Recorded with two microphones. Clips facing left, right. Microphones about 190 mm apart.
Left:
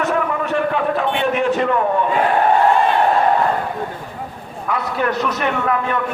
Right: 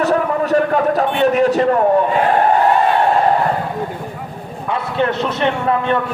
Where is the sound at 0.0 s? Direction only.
35° right (ahead or behind).